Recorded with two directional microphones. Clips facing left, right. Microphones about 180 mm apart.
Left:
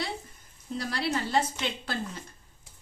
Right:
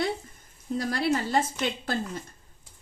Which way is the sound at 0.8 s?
45° right (ahead or behind).